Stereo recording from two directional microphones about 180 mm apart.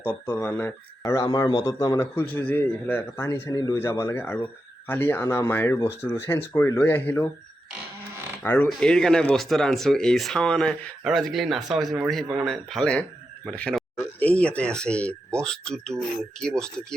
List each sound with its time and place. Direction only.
0.0 s speech: 10° left (ahead or behind)
8.4 s speech: 10° left (ahead or behind)